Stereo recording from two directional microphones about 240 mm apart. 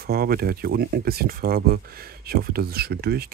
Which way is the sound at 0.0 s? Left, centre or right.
Right.